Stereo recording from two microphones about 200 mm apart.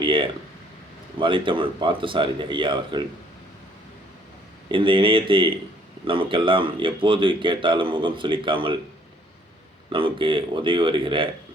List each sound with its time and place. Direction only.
0.0 s a sound: 25° right (ahead or behind)
1.2 s speech: 25° right (ahead or behind)
4.7 s speech: 25° right (ahead or behind)
9.9 s speech: 25° right (ahead or behind)